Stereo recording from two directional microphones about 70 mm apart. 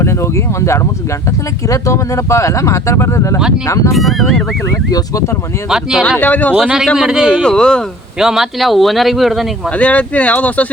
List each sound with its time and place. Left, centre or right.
0.0 s speech: left
3.9 s speech: centre
4.9 s speech: left
5.6 s a man's voice: centre
6.1 s speech: left
6.6 s a man's voice: centre
7.4 s speech: centre
8.2 s speech: centre
9.7 s speech: left